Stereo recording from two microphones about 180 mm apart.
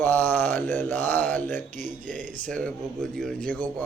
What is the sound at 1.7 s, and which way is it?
Speech, 45° right (ahead or behind).